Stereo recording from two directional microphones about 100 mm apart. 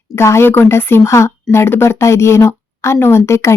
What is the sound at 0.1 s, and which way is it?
Speech, 30° left (ahead or behind).